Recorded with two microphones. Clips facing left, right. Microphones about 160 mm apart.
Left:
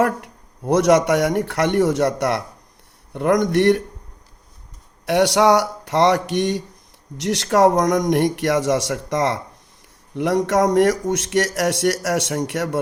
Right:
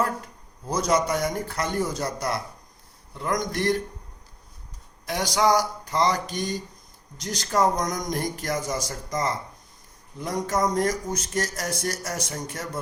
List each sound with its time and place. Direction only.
0.0 s speech: 70° left (ahead or behind)
5.0 s speech: 65° left (ahead or behind)